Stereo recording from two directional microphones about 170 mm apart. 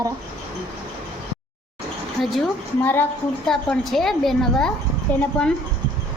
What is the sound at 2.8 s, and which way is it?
A woman's voice, 10° left (ahead or behind).